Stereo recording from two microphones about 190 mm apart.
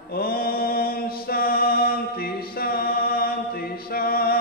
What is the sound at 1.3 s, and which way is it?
Mantra, 50° left (ahead or behind).